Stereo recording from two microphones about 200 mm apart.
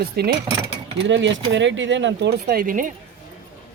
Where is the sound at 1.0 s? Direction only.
60° right (ahead or behind); by 2.8 s 45° right (ahead or behind).